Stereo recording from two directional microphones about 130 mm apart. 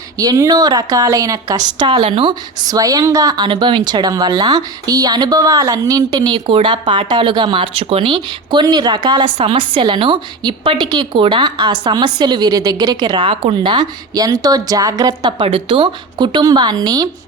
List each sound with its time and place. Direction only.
0.2 s a woman's voice: 30° right (ahead or behind)
2.0 s speech: 50° right (ahead or behind)
2.6 s speech: 30° right (ahead or behind)
13.3 s speech: 45° right (ahead or behind); by 15.3 s 30° right (ahead or behind)
15.4 s speech: 45° right (ahead or behind)